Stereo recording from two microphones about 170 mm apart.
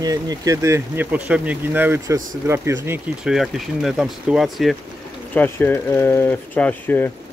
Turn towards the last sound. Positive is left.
turn(degrees=10)  # may be behind; listen again after turning